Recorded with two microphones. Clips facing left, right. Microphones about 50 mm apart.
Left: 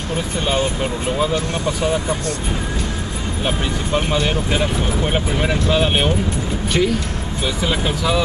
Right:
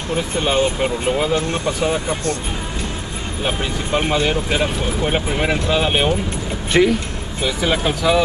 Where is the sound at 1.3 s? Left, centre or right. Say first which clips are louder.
Right 1 dB; right.